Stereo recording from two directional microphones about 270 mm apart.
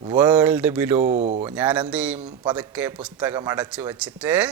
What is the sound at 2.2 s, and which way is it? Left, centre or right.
Speech, centre.